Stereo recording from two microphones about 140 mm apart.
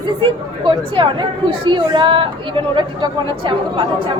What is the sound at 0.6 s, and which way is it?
Speech, 35° right (ahead or behind).